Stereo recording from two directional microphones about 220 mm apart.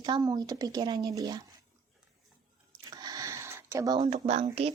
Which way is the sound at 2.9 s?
15° right (ahead or behind).